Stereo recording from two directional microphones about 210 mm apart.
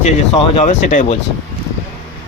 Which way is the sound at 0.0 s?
30° left (ahead or behind).